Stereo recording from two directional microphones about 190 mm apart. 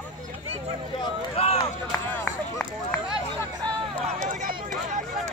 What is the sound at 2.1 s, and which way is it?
Run, 10° left (ahead or behind).